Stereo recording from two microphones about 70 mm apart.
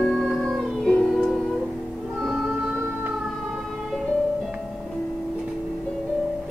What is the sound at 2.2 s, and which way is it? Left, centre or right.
Music, centre.